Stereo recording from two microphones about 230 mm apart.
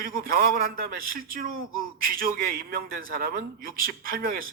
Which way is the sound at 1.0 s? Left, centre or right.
Right.